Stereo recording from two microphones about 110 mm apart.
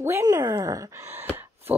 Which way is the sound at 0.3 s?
30° right (ahead or behind).